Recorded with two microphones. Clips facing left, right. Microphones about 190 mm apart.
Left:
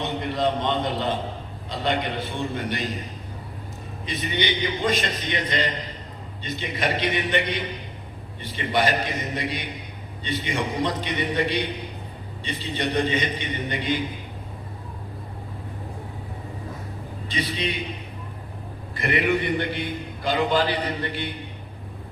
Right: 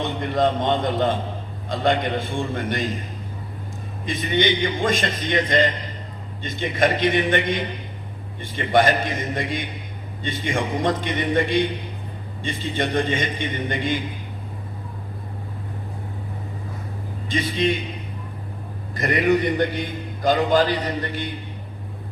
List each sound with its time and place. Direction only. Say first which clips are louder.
0.2 s a man's voice: right 4 dB; 50° right (ahead or behind)
4.0 s a man's voice: right 5 dB; 50° right (ahead or behind)
8.5 s a man's voice: right 5 dB; 50° right (ahead or behind)
17.2 s a man's voice: right 6 dB; 50° right (ahead or behind)
18.9 s a man's voice: right 4 dB; 45° right (ahead or behind)